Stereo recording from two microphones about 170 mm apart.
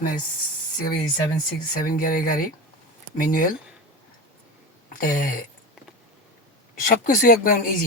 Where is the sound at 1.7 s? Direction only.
55° left (ahead or behind).